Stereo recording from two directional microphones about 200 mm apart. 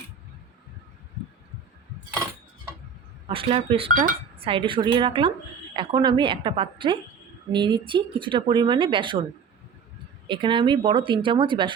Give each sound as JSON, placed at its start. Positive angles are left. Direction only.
{"t": 3.2, "sound": "speech", "side_deg": -25}
{"t": 10.2, "sound": "speech", "side_deg": -25}